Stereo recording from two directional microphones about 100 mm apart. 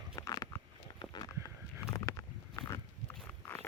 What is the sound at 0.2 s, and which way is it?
Biting, 40° left (ahead or behind).